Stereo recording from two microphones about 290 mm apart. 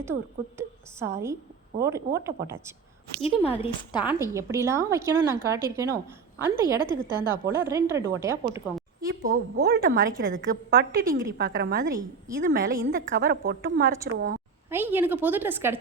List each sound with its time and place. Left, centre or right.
0.0 s a woman's voice: centre
3.2 s a woman's voice: centre
4.0 s a woman's voice: centre
9.3 s a woman's voice: right
14.7 s a woman's voice: centre